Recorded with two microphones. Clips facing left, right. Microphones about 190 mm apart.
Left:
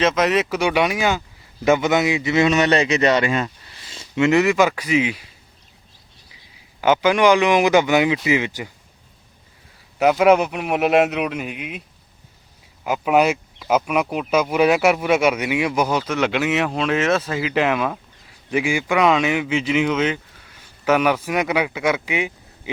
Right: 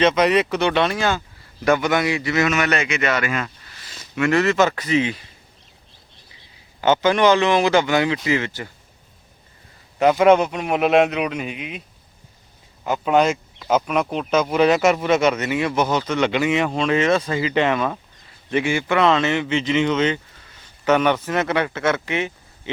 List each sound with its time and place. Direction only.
0.0 s a man's voice: centre (ahead or behind)
6.8 s speech: 10° left (ahead or behind)
10.0 s a man's voice: 5° left (ahead or behind)
12.8 s speech: 5° left (ahead or behind)